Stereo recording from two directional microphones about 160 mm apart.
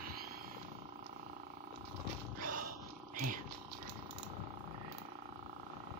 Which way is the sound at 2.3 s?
60° right (ahead or behind).